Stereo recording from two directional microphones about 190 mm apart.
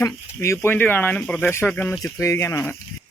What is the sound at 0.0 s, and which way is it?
Speech, 15° left (ahead or behind).